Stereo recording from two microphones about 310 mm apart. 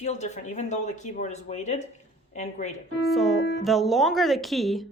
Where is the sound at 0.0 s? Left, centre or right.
Left.